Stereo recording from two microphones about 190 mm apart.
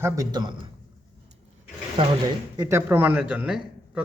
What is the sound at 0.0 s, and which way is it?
Speech, 20° right (ahead or behind).